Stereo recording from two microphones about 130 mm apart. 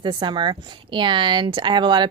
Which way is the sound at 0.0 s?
40° right (ahead or behind).